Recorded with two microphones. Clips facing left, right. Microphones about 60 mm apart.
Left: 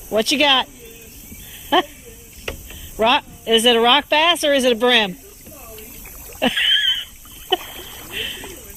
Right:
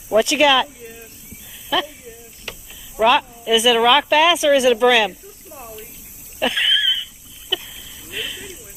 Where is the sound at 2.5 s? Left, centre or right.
Left.